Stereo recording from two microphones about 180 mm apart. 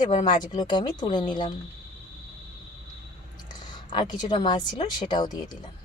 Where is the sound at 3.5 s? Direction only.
25° left (ahead or behind).